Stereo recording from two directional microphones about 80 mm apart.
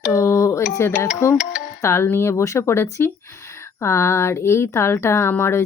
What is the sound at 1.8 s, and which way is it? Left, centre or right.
Speech, left.